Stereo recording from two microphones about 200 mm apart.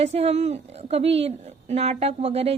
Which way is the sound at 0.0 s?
30° right (ahead or behind).